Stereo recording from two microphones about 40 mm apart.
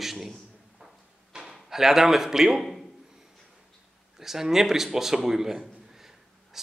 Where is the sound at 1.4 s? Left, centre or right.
Centre.